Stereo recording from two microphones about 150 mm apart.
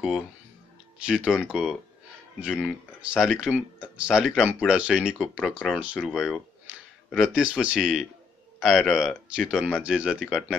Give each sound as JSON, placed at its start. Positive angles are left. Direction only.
{"t": 1.0, "sound": "speech", "side_deg": -5}
{"t": 10.1, "sound": "speech", "side_deg": 5}